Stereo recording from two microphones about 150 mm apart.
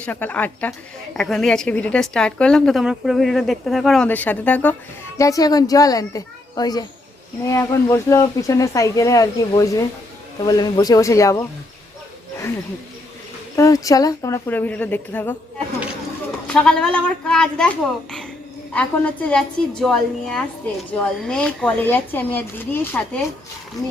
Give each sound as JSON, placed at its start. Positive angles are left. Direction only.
{"t": 0.0, "sound": "speech", "side_deg": 10}
{"t": 5.1, "sound": "speech", "side_deg": 20}
{"t": 13.6, "sound": "speech", "side_deg": 20}
{"t": 18.7, "sound": "speech", "side_deg": 10}